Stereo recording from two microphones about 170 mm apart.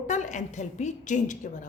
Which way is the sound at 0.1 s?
45° left (ahead or behind).